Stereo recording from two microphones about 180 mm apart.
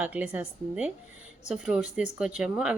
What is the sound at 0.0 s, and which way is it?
A woman's voice, 10° right (ahead or behind).